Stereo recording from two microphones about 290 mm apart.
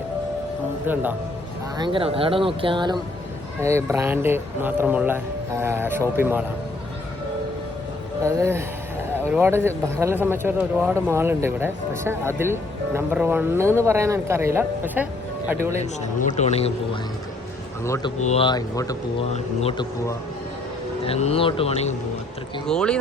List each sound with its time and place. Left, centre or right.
0.9 s speech: centre
1.8 s speech: centre
8.2 s speech: centre
16.3 s speech: left
17.8 s a man's voice: centre
18.2 s a man's voice: left
22.6 s speech: centre